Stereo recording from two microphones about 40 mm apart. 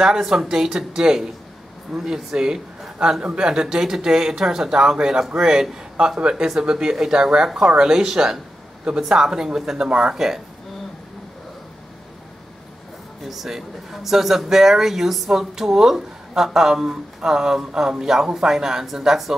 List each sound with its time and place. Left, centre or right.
0.0 s speech: centre
13.2 s speech: centre